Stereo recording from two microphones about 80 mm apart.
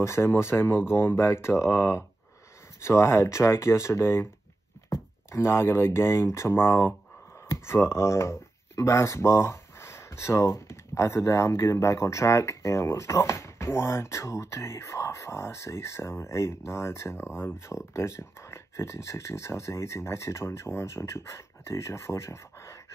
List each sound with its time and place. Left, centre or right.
0.0 s speech: left